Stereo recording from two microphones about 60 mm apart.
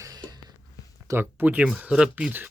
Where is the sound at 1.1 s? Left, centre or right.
Right.